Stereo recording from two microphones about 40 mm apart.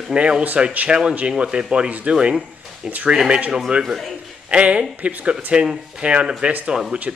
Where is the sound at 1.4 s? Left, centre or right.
Centre.